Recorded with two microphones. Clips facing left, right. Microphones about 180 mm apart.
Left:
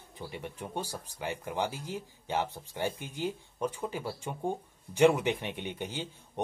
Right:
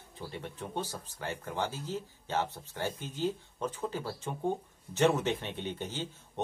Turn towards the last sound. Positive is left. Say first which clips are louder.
# left 1 dB
turn(degrees=15)  # may be behind; listen again after turning